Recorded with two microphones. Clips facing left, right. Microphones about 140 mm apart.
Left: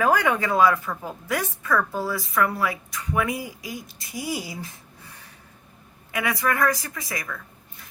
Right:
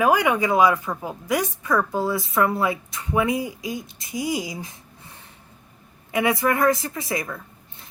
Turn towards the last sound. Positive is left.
turn(degrees=-25)  # may be behind; listen again after turning